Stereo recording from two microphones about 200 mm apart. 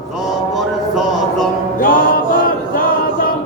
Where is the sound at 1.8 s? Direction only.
45° left (ahead or behind).